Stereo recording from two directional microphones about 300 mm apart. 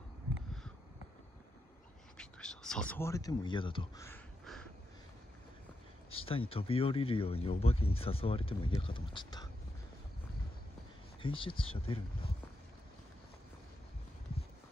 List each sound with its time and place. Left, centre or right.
2.1 s speech: centre
6.0 s a sound: centre
6.5 s speech: centre
11.2 s speech: centre